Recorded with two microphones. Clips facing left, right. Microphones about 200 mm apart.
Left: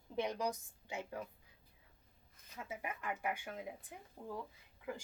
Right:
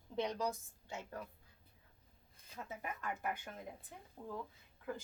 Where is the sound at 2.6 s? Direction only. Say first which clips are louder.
Left 1 dB; 10° left (ahead or behind).